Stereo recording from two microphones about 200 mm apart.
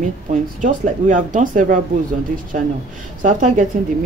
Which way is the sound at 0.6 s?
40° right (ahead or behind).